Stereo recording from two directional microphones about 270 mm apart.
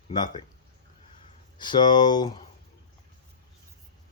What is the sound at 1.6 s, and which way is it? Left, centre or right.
Speech, centre.